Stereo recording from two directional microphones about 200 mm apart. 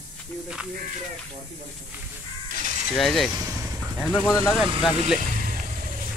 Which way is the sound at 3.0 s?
Centre (ahead or behind).